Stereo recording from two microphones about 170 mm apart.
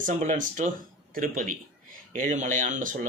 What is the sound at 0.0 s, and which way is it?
A man's voice, 45° right (ahead or behind).